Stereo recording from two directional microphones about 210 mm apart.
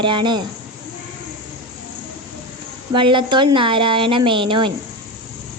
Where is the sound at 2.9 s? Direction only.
25° right (ahead or behind).